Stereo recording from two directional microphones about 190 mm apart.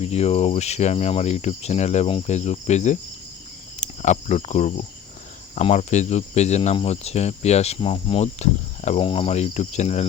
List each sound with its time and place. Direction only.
0.0 s speech: 35° left (ahead or behind)
3.8 s cricket: 40° left (ahead or behind)
5.5 s speech: 35° left (ahead or behind)